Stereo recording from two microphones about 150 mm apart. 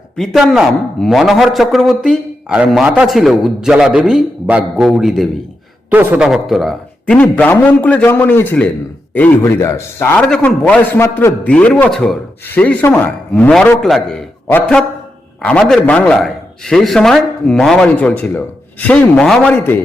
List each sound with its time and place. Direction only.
0.2 s a man's voice: centre (ahead or behind)
5.9 s a man's voice: 10° right (ahead or behind); by 10.2 s 15° left (ahead or behind)
10.2 s a man's voice: 5° left (ahead or behind)